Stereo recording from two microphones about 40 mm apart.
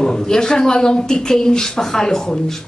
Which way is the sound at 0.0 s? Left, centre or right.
Centre.